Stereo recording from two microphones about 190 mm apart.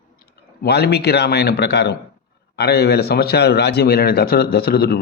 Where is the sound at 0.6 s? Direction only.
55° left (ahead or behind).